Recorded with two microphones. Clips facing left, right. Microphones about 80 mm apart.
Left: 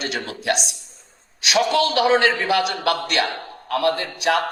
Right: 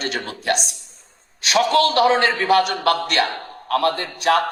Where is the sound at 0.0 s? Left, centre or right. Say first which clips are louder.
Right 1 dB; right.